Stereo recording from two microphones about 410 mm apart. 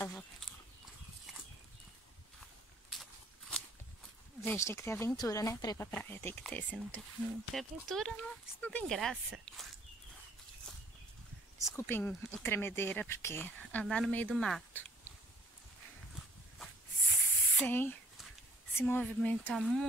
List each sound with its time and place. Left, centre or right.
0.0 s livestock: centre
2.9 s walk: centre
4.5 s speech: centre
11.6 s speech: centre
17.1 s spray: centre
18.8 s speech: centre